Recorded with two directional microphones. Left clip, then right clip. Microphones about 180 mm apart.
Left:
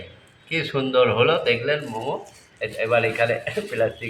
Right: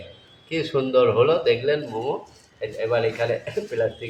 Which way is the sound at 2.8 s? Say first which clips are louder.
Left 2 dB; 10° right (ahead or behind).